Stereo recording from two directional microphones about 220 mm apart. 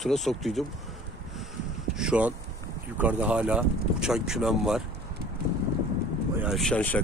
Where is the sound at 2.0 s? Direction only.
5° right (ahead or behind).